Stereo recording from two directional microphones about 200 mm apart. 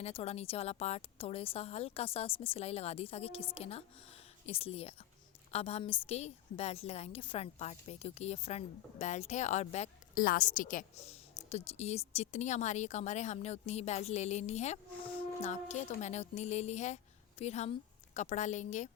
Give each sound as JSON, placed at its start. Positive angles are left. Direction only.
{"t": 0.0, "sound": "a woman's voice", "side_deg": 30}